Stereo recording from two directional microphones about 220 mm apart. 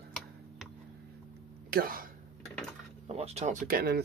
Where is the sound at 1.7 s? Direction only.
40° right (ahead or behind).